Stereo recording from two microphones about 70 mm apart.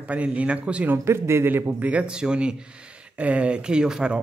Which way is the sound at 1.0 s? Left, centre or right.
Right.